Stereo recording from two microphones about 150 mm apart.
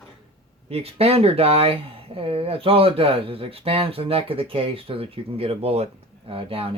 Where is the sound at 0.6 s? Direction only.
40° right (ahead or behind).